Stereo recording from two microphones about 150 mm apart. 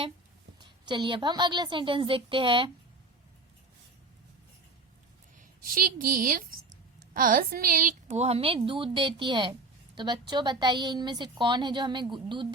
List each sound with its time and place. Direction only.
0.6 s a woman's voice: 30° right (ahead or behind)
5.4 s a woman's voice: 65° right (ahead or behind); by 12.5 s 30° right (ahead or behind)